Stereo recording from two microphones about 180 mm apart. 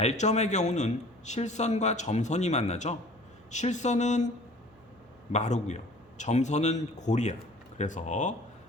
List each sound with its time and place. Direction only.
0.0 s a man's voice: 40° left (ahead or behind)
5.3 s a man's voice: 40° left (ahead or behind)